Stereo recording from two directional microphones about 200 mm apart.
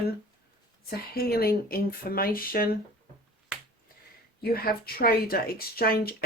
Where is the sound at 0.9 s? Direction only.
50° left (ahead or behind).